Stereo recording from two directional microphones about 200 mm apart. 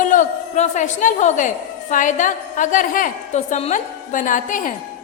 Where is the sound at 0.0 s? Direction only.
40° left (ahead or behind).